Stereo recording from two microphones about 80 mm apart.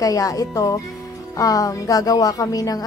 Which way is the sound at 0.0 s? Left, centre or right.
Left.